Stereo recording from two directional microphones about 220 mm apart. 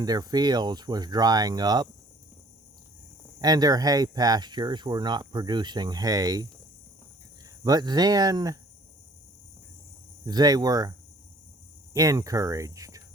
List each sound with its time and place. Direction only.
0.0 s speech: 15° right (ahead or behind)
3.4 s speech: 15° right (ahead or behind)
7.6 s speech: 20° right (ahead or behind)
10.2 s speech: 20° right (ahead or behind)
11.9 s speech: 15° right (ahead or behind)